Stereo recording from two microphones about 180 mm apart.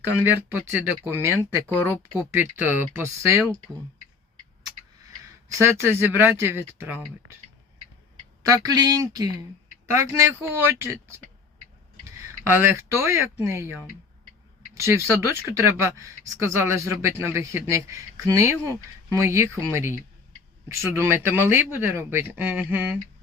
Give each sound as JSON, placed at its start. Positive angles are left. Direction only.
{"t": 0.2, "sound": "speech", "side_deg": -10}
{"t": 5.5, "sound": "speech", "side_deg": -15}
{"t": 8.4, "sound": "speech", "side_deg": -20}
{"t": 12.5, "sound": "speech", "side_deg": -10}